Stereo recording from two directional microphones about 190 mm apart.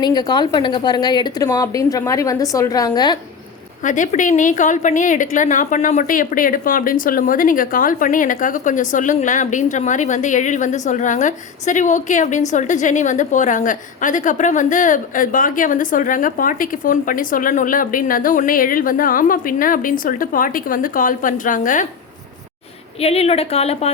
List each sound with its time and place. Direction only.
0.0 s a woman's voice: 20° left (ahead or behind)
3.8 s a woman's voice: 40° left (ahead or behind)
23.0 s a woman's voice: 30° left (ahead or behind)